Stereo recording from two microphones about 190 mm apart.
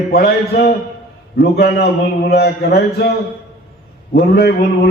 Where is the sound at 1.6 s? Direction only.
60° left (ahead or behind).